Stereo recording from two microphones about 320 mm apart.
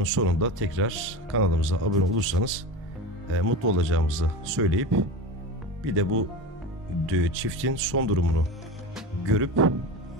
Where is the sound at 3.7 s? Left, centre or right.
Right.